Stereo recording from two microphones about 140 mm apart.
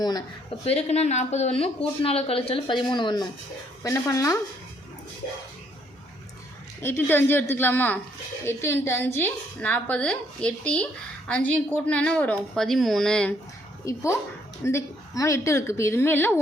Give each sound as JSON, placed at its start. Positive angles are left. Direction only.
{"t": 0.0, "sound": "a woman's voice", "side_deg": 30}
{"t": 0.6, "sound": "speech", "side_deg": 45}
{"t": 3.8, "sound": "a woman's voice", "side_deg": 20}
{"t": 6.8, "sound": "a woman's voice", "side_deg": 15}
{"t": 13.8, "sound": "a woman's voice", "side_deg": 20}